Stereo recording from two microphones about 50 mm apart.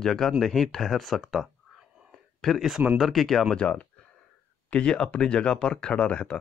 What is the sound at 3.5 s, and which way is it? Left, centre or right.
Speech, centre.